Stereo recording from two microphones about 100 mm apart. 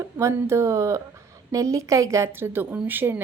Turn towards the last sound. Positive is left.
turn(degrees=-20)  # may be behind; listen again after turning